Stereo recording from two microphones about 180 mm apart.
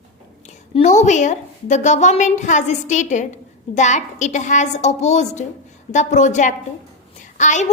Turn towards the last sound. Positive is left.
turn(degrees=45)  # may be behind; listen again after turning